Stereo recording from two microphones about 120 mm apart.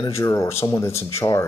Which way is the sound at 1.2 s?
25° left (ahead or behind).